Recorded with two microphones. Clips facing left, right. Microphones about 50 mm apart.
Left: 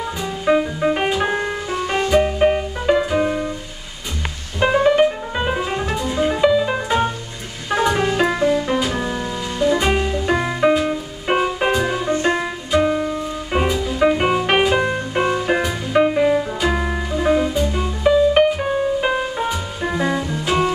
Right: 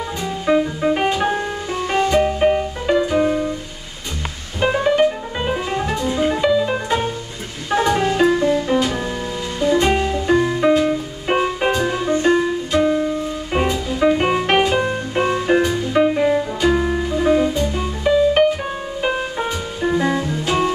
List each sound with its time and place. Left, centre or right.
0.2 s music: centre
4.6 s music: centre
10.3 s music: centre
12.2 s music: left
13.6 s music: centre